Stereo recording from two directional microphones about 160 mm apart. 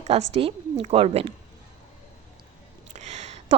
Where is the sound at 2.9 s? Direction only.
45° right (ahead or behind).